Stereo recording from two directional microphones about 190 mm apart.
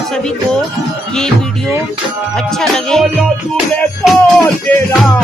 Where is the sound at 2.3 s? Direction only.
Centre (ahead or behind).